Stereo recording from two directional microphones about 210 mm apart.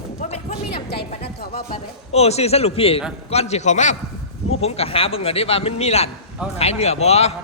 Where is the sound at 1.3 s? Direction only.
50° left (ahead or behind).